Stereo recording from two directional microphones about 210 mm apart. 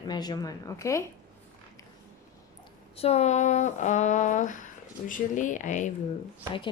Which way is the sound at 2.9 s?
30° left (ahead or behind).